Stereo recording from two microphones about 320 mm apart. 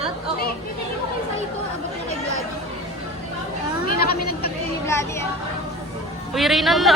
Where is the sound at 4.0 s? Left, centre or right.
Left.